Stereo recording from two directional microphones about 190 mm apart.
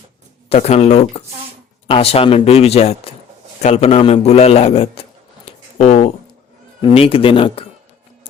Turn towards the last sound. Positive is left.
turn(degrees=30)  # may be behind; listen again after turning